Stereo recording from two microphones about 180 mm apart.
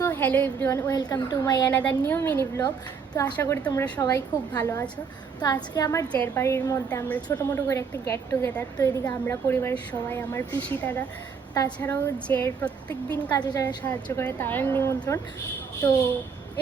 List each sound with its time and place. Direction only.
0.0 s a woman's voice: 10° left (ahead or behind)
1.7 s a woman's voice: 10° left (ahead or behind)
4.0 s a woman's voice: 20° left (ahead or behind)
11.8 s a woman's voice: 10° left (ahead or behind)
13.3 s a woman's voice: 20° left (ahead or behind)
13.8 s a woman's voice: 10° left (ahead or behind)